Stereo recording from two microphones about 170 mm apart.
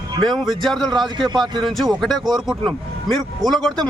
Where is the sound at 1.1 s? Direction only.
25° right (ahead or behind).